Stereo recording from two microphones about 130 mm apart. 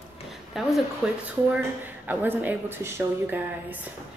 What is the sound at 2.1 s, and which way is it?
A woman's voice, 15° right (ahead or behind).